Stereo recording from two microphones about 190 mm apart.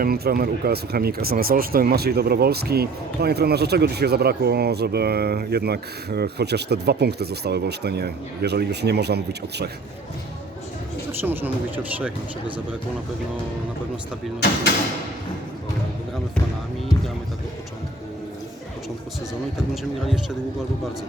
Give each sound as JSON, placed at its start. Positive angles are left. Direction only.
{"t": 0.0, "sound": "speech", "side_deg": -50}
{"t": 11.2, "sound": "speech", "side_deg": -10}